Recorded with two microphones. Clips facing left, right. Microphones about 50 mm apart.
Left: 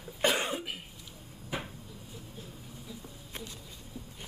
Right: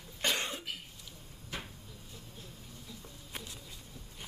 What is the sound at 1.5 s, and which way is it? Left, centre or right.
Cupboard open or close, centre.